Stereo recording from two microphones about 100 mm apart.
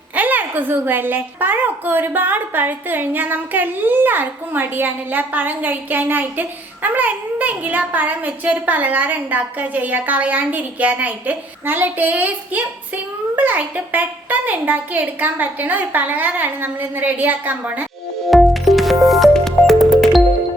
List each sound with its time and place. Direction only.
0.2 s a woman's voice: 15° right (ahead or behind)
18.3 s music: centre (ahead or behind)